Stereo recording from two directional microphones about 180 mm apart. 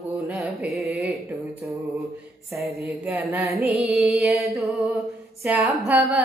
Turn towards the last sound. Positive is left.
turn(degrees=-5)  # may be behind; listen again after turning